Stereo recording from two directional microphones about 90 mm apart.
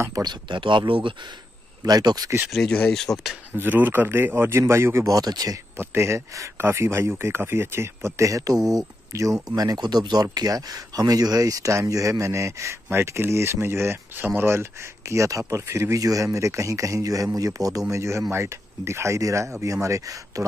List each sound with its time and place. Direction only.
0.2 s speech: 55° right (ahead or behind)
1.9 s speech: 45° right (ahead or behind)
2.5 s speech: 5° left (ahead or behind)
3.5 s speech: 20° right (ahead or behind)
5.1 s speech: 45° right (ahead or behind)
5.8 s speech: 30° right (ahead or behind)